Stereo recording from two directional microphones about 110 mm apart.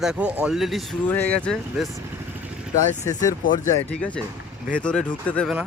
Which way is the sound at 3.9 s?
10° left (ahead or behind).